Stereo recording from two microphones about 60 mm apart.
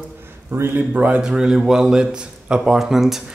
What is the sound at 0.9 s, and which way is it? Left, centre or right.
Speech, right.